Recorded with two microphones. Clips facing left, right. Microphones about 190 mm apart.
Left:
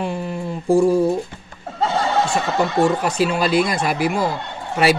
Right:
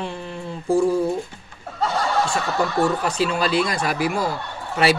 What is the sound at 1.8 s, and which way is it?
Speech, 20° left (ahead or behind).